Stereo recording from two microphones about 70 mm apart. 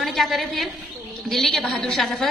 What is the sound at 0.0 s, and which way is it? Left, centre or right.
A woman's voice, centre.